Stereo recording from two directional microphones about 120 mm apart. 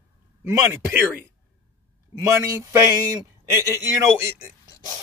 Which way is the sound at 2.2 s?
25° right (ahead or behind).